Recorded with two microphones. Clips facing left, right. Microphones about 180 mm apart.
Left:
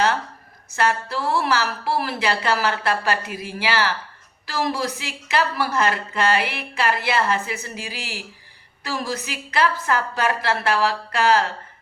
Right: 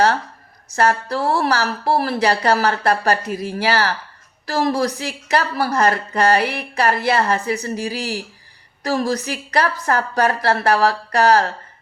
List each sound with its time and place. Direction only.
0.8 s a woman's voice: 40° right (ahead or behind)